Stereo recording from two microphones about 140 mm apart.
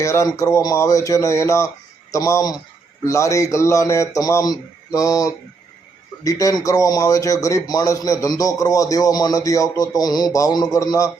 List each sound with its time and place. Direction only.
0.0 s a man's voice: 20° left (ahead or behind)